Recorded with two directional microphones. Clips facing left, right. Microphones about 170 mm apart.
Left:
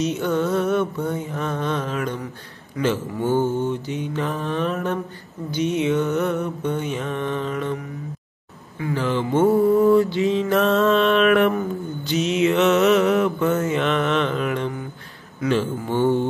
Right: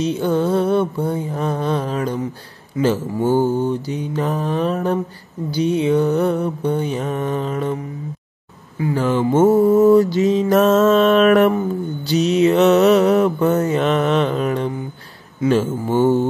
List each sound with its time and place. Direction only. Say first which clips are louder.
0.0 s mantra: right 3 dB; 30° right (ahead or behind)
8.9 s mantra: right 4 dB; 45° right (ahead or behind)